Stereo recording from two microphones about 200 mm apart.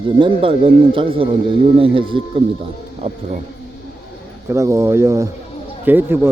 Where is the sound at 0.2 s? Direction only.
25° right (ahead or behind).